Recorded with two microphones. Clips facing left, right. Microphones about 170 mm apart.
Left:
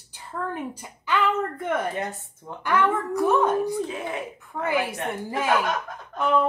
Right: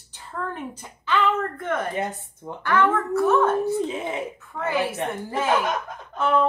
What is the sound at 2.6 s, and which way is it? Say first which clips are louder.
Speech: right 2 dB; 15° left (ahead or behind).